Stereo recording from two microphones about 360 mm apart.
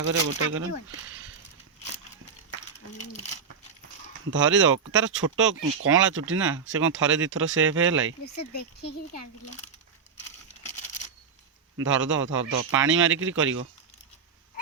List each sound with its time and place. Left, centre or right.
0.3 s speech: right
4.3 s speech: right
8.2 s speech: left
11.8 s speech: right